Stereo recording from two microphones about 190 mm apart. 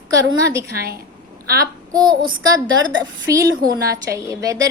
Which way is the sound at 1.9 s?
20° right (ahead or behind).